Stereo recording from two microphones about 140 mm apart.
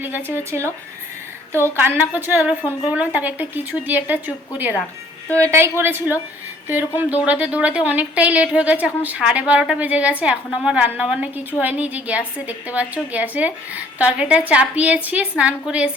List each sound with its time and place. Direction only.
0.5 s a woman's voice: 10° right (ahead or behind)
1.7 s a woman's voice: 15° right (ahead or behind)